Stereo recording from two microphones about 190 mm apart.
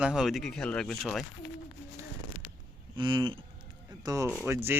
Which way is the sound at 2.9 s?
25° right (ahead or behind).